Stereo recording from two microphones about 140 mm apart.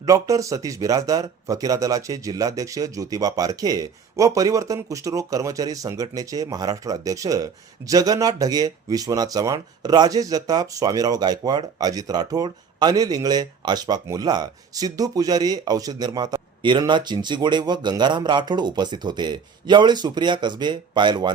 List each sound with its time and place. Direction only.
0.0 s speech: 25° right (ahead or behind)